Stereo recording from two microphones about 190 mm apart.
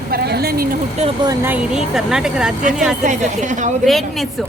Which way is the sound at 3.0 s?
40° right (ahead or behind).